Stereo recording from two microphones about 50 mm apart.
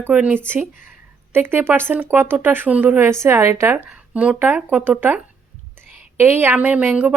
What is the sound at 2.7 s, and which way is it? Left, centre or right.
Speech, right.